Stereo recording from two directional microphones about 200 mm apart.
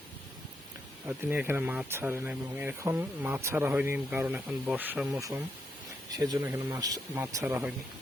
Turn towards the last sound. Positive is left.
turn(degrees=-10)  # may be behind; listen again after turning